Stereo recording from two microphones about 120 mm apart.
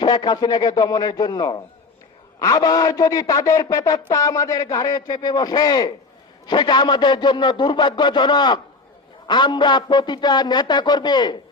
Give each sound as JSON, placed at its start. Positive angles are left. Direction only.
{"t": 0.0, "sound": "a man's voice", "side_deg": 40}